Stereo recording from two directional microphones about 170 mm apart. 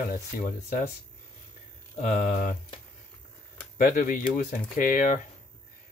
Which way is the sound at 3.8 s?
55° left (ahead or behind).